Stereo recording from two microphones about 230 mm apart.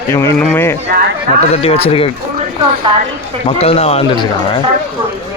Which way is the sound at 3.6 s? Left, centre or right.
Left.